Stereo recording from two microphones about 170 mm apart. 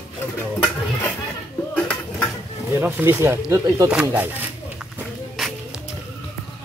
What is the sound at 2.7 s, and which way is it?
Speech, 10° right (ahead or behind).